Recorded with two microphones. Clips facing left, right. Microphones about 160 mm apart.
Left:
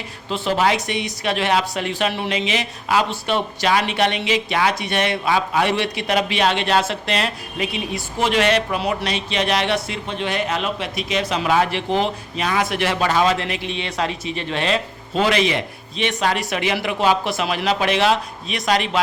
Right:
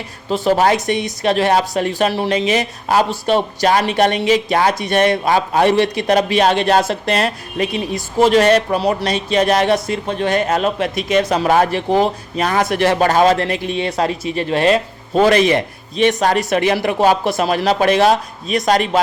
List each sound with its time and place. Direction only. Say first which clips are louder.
0.3 s a woman's voice: right 5 dB; 40° right (ahead or behind)